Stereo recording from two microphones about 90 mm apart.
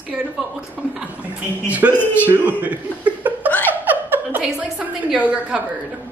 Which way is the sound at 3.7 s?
20° right (ahead or behind).